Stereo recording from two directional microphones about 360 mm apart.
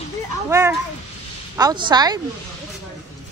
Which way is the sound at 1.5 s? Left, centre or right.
Centre.